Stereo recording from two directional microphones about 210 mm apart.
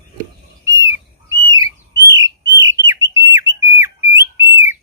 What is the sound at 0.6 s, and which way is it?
Squawk, 15° right (ahead or behind).